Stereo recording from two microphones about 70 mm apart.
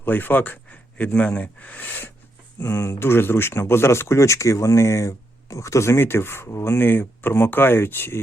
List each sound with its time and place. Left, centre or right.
0.0 s speech: left
2.6 s speech: left